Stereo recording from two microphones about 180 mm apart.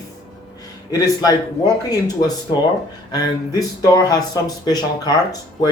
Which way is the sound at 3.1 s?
20° left (ahead or behind).